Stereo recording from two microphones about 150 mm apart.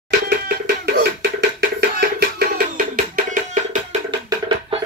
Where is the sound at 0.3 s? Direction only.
90° right.